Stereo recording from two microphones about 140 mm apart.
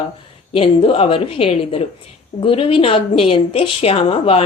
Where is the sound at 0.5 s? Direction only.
40° left (ahead or behind).